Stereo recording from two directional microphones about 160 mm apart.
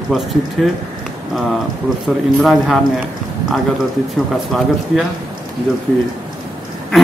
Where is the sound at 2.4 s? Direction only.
Centre (ahead or behind).